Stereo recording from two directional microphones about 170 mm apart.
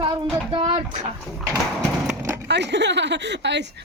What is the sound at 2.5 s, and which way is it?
Speech, 90° right.